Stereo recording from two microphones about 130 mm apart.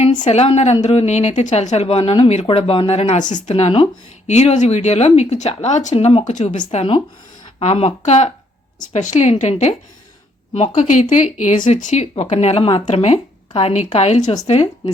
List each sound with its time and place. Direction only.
0.2 s speech: 55° left (ahead or behind); by 3.5 s 70° left (ahead or behind)
3.5 s a woman's voice: 50° left (ahead or behind)
4.3 s speech: 60° left (ahead or behind)
6.3 s speech: 65° left (ahead or behind)
11.1 s a woman's voice: 75° left (ahead or behind); by 14.7 s 55° left (ahead or behind)